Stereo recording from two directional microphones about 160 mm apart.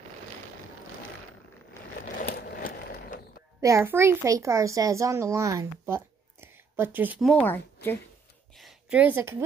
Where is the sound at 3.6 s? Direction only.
15° right (ahead or behind).